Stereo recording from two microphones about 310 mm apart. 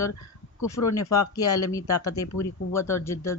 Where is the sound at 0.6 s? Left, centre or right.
Left.